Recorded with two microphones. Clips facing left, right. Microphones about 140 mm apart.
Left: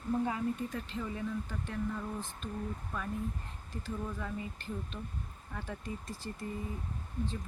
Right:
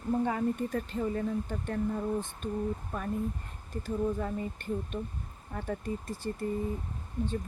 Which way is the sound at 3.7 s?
55° right (ahead or behind).